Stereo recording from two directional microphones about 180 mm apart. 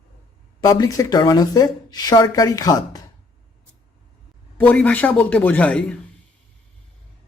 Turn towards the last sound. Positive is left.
turn(degrees=5)  # may be behind; listen again after turning